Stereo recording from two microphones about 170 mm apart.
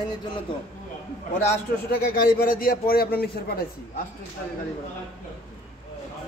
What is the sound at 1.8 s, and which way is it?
A man's voice, 60° left (ahead or behind).